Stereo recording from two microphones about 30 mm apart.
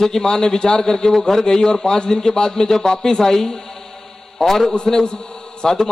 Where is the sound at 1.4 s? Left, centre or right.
Left.